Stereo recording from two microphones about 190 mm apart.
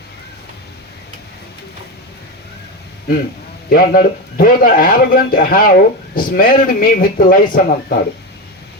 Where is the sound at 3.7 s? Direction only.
50° left (ahead or behind).